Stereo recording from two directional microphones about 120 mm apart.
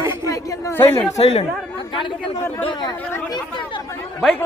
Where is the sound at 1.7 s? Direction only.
45° left (ahead or behind).